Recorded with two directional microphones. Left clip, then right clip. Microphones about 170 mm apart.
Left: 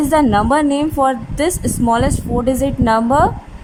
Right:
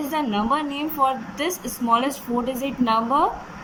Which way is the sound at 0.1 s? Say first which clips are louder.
Left 9 dB; 45° left (ahead or behind).